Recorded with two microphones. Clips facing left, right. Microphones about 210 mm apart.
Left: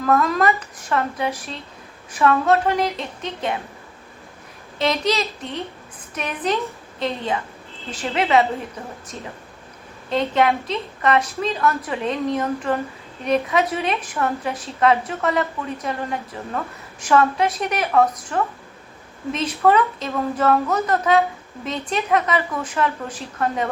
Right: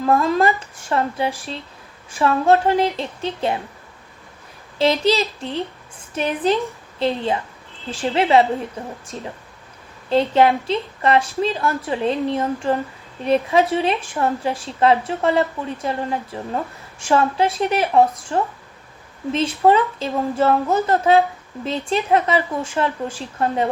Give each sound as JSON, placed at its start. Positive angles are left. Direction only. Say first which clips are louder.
{"t": 0.0, "sound": "a woman's voice", "louder": "right 1 dB", "side_deg": -30}
{"t": 4.8, "sound": "a woman's voice", "louder": "right 4 dB", "side_deg": -30}